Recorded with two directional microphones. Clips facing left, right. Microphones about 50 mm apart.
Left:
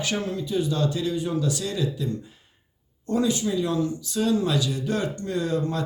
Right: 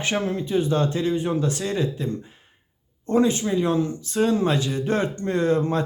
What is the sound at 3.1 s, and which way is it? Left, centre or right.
Speech, right.